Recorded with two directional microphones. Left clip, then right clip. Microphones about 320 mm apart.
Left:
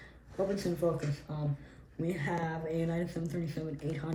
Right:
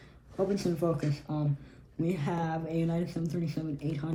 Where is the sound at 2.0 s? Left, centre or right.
Centre.